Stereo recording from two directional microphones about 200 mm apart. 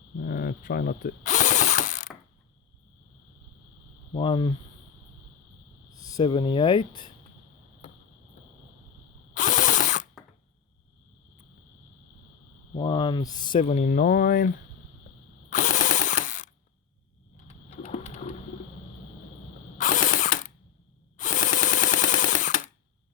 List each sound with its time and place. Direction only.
0.2 s a sound: 45° left (ahead or behind)
4.1 s speech: 25° left (ahead or behind)
6.0 s speech: 20° left (ahead or behind)
9.3 s ratchet: 40° left (ahead or behind)
12.7 s speech: 25° left (ahead or behind); by 14.5 s 45° left (ahead or behind)
15.4 s mechanisms: 40° left (ahead or behind)
17.7 s a sound: 35° left (ahead or behind)
19.8 s ratchet: 40° left (ahead or behind)
21.2 s a sound: 40° left (ahead or behind)